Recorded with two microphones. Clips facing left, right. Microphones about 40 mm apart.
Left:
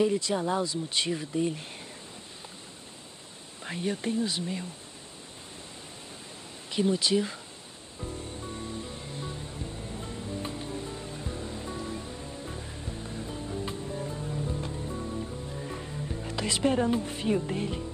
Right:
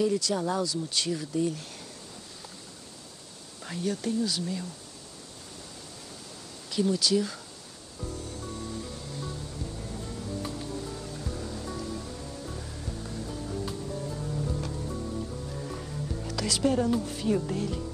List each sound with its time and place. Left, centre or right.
0.0 s speech: left
3.6 s speech: left
6.7 s speech: left
8.0 s music: left; by 15.6 s centre
15.6 s music: centre
16.3 s speech: left